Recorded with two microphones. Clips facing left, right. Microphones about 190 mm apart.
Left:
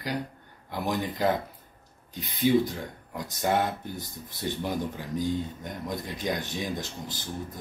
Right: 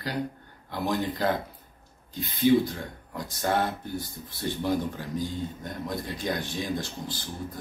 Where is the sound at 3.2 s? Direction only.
15° left (ahead or behind).